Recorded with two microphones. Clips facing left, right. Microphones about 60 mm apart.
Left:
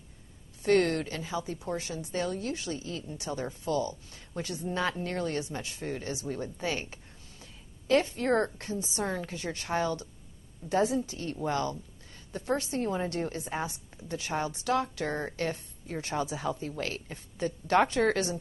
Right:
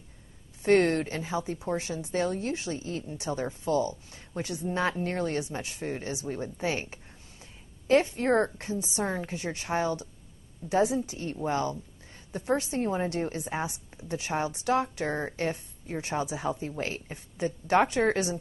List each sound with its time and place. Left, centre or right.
0.6 s speech: right